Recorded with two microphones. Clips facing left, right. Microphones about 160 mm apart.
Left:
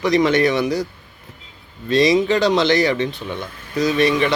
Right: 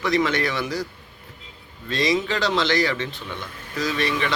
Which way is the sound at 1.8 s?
20° left (ahead or behind).